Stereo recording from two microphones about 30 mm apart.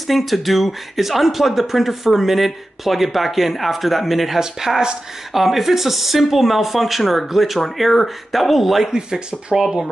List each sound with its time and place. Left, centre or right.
0.0 s speech: centre
4.4 s speech: centre
5.3 s speech: centre
8.9 s speech: right